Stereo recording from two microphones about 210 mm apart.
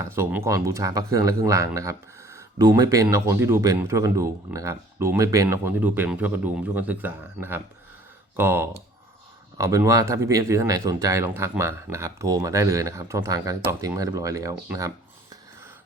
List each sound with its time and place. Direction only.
0.0 s speech: 10° right (ahead or behind)